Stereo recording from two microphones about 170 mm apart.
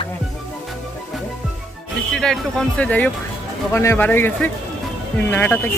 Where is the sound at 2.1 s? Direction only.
5° left (ahead or behind).